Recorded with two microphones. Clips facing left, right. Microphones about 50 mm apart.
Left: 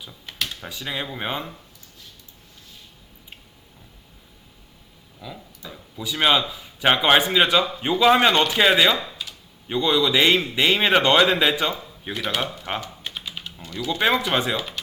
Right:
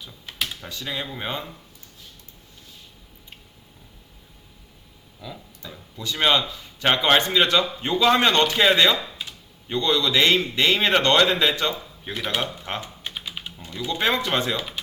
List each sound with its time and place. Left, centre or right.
0.6 s speech: centre
5.2 s speech: centre
12.2 s speech: centre
12.7 s speech: centre
13.1 s typing: centre
13.7 s speech: centre
14.0 s speech: centre